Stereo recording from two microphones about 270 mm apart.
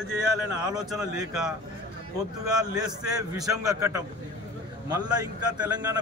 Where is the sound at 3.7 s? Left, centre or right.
Centre.